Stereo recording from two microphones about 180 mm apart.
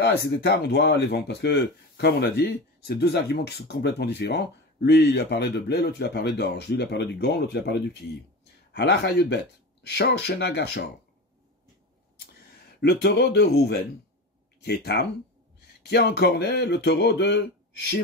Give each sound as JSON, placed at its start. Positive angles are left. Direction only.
{"t": 0.0, "sound": "speech", "side_deg": 65}
{"t": 12.8, "sound": "speech", "side_deg": 70}